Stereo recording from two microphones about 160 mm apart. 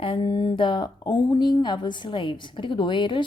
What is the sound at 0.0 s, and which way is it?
Speech, 35° left (ahead or behind).